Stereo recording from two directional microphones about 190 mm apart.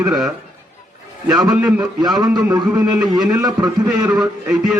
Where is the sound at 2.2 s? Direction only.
20° right (ahead or behind).